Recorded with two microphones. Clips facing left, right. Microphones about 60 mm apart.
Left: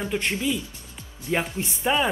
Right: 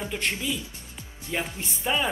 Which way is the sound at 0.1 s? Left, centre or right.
Centre.